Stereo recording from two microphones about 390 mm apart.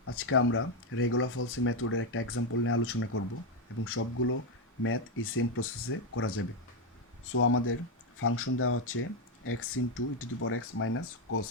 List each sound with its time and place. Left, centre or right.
0.0 s speech: left